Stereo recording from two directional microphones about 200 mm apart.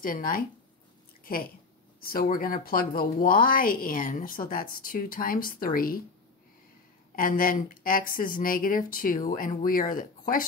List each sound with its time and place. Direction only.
0.0 s a woman's voice: 45° left (ahead or behind)
7.2 s a woman's voice: 45° left (ahead or behind)